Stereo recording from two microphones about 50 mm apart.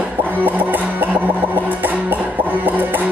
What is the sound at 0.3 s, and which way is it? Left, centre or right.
Music, right.